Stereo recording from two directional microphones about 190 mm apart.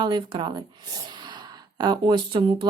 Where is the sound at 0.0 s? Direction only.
25° right (ahead or behind).